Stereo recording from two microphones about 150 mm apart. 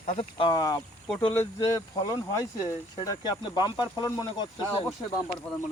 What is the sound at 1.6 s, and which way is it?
Speech, 25° left (ahead or behind).